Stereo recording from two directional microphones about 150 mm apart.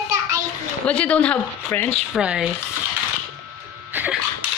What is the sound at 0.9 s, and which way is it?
A woman's voice, 10° left (ahead or behind).